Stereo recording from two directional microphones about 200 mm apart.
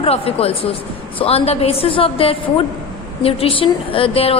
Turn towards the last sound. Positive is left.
turn(degrees=30)  # may be behind; listen again after turning